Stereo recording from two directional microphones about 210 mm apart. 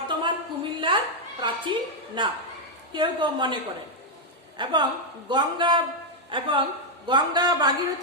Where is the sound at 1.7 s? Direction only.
20° right (ahead or behind).